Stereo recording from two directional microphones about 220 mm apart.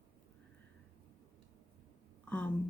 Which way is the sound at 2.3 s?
10° left (ahead or behind).